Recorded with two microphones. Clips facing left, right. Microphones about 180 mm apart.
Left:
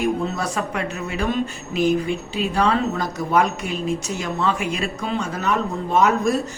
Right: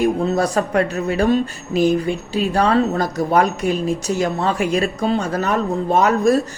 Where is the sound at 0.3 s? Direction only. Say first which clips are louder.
Right 7 dB; 35° right (ahead or behind).